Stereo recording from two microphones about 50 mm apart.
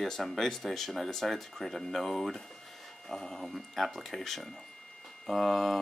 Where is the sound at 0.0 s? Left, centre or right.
Centre.